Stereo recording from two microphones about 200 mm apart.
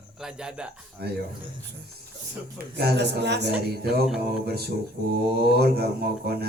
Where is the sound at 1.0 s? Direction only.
55° right (ahead or behind).